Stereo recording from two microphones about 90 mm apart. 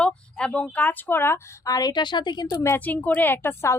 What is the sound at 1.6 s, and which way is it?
Speech, 45° left (ahead or behind).